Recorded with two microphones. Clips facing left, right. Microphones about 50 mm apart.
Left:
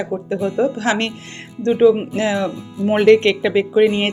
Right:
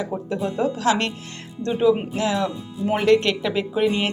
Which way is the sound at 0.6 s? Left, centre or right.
Left.